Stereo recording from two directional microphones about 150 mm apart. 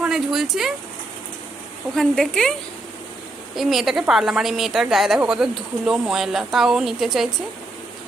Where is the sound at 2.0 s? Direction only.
5° left (ahead or behind).